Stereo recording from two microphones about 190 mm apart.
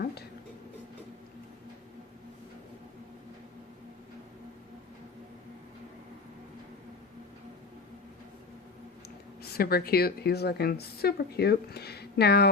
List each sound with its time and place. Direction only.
0.0 s music: 55° left (ahead or behind)
9.4 s a woman's voice: 55° left (ahead or behind)